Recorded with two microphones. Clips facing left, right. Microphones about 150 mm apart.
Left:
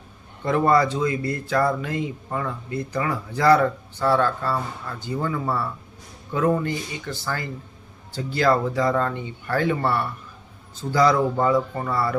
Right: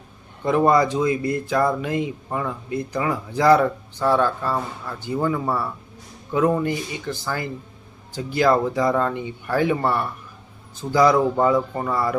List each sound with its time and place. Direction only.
0.4 s speech: 15° right (ahead or behind)